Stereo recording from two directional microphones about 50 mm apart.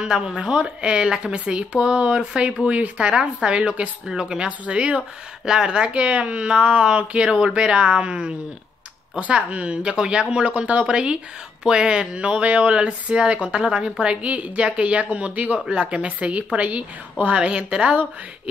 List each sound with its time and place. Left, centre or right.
0.0 s speech: centre
9.3 s speech: right